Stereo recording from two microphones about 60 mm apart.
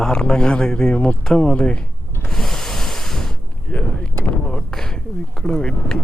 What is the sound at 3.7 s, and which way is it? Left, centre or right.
Vehicle, left.